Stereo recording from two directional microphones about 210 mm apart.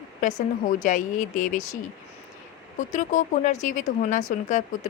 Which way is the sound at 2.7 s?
35° left (ahead or behind).